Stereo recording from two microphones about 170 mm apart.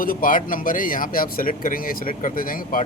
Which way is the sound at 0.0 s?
55° left (ahead or behind).